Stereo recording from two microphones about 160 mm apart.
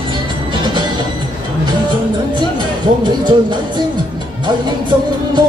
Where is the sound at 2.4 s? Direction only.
30° right (ahead or behind).